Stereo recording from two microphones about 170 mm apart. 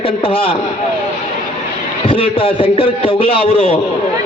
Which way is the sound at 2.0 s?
30° left (ahead or behind).